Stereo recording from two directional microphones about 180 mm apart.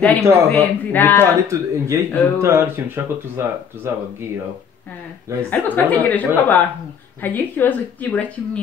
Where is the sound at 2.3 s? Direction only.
15° right (ahead or behind).